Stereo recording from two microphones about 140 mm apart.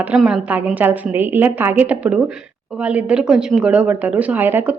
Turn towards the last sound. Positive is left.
turn(degrees=-15)  # may be behind; listen again after turning